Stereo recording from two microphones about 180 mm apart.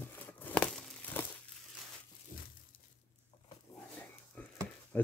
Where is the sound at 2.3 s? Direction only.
50° left (ahead or behind).